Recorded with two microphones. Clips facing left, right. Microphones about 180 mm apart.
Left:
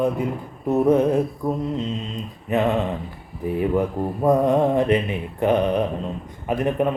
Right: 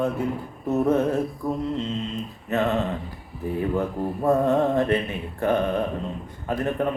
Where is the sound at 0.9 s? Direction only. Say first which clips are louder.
Left 4 dB; 15° left (ahead or behind).